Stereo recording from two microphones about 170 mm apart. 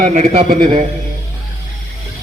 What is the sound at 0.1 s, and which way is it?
Speech, 45° right (ahead or behind).